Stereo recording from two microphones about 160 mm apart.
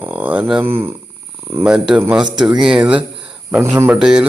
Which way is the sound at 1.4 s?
15° right (ahead or behind).